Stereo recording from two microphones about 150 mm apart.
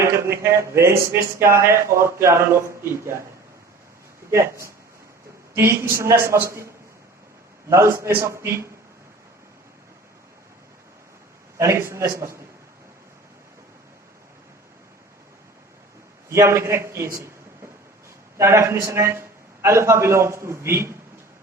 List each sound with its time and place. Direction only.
0.0 s speech: 20° right (ahead or behind)
4.3 s speech: 20° right (ahead or behind)
7.7 s speech: 20° right (ahead or behind)
11.5 s speech: 20° right (ahead or behind)
16.3 s speech: 20° right (ahead or behind)
18.3 s speech: 20° right (ahead or behind)